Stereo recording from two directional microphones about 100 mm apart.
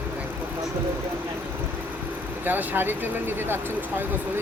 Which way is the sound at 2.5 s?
20° right (ahead or behind).